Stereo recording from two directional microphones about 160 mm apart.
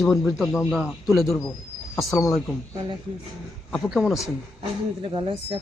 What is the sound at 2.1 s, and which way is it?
Speech, 20° left (ahead or behind).